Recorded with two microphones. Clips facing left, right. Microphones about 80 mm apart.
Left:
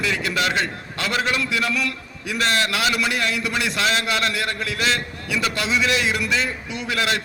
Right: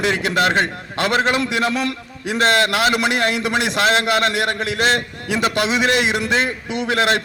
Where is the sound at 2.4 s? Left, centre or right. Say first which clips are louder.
Right 5 dB; right.